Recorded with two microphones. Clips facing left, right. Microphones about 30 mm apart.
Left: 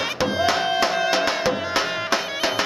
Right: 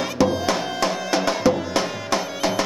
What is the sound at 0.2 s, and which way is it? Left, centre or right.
Music, left.